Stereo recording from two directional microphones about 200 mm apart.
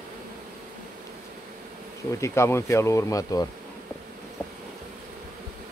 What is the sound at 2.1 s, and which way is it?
Speech, 15° left (ahead or behind).